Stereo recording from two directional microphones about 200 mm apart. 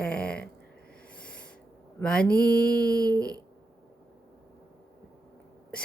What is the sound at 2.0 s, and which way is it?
Speech, 5° left (ahead or behind).